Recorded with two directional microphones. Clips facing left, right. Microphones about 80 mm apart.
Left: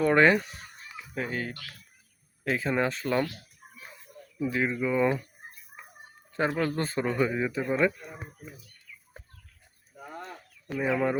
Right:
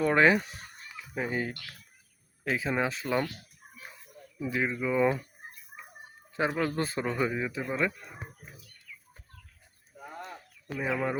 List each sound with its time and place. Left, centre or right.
0.0 s speech: centre
1.1 s speech: centre
2.4 s speech: centre
4.4 s speech: centre
6.3 s speech: centre
10.0 s a sound: centre
10.8 s speech: centre